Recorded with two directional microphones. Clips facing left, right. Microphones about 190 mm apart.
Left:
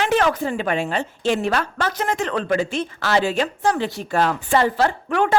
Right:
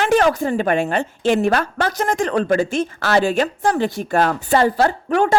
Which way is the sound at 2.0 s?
45° right (ahead or behind).